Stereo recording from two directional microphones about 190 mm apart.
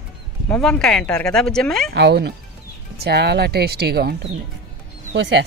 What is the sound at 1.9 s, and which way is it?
Speech, 60° right (ahead or behind).